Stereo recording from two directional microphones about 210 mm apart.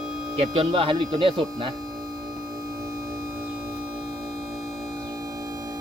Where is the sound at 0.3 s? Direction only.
25° right (ahead or behind).